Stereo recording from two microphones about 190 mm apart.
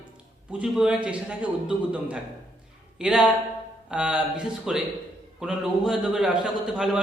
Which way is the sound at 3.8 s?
5° right (ahead or behind).